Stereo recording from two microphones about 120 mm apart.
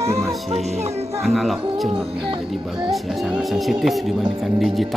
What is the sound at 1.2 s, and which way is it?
Speech, centre (ahead or behind).